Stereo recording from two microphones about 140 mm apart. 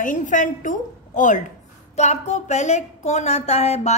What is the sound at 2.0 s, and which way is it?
A woman's voice, 55° left (ahead or behind).